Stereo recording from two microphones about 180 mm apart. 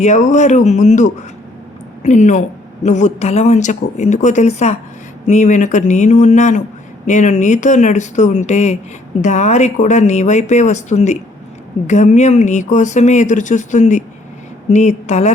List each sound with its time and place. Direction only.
0.0 s speech: 45° left (ahead or behind)